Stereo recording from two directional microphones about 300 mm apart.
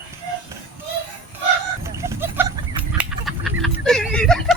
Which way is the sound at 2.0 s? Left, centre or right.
Centre.